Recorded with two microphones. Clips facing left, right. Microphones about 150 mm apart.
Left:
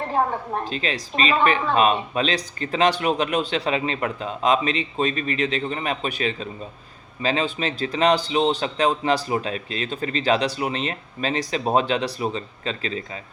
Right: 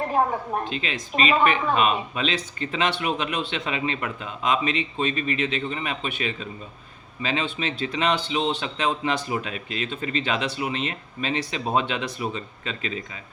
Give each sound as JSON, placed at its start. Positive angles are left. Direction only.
{"t": 0.6, "sound": "speech", "side_deg": 35}